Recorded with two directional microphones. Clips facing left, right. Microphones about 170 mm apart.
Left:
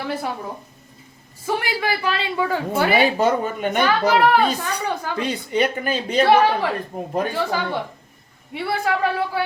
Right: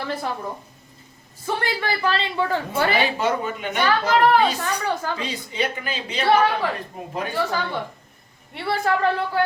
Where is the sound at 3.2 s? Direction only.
45° left (ahead or behind).